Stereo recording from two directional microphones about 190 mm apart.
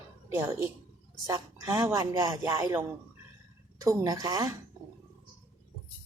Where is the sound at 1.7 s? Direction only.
15° right (ahead or behind).